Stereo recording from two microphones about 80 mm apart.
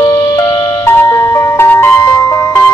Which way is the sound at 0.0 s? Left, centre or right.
Left.